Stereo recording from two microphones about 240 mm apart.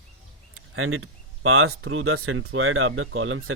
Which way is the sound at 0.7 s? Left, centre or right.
Right.